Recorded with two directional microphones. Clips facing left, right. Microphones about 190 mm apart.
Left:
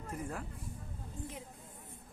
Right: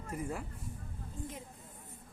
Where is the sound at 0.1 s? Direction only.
10° right (ahead or behind).